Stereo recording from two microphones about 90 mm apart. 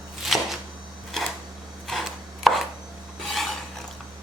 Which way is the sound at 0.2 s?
Centre (ahead or behind).